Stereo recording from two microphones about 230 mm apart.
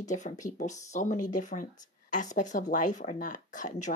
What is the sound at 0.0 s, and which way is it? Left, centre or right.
Speech, left.